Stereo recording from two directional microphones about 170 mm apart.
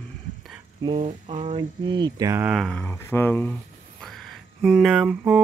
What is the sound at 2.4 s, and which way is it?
Speech, centre (ahead or behind).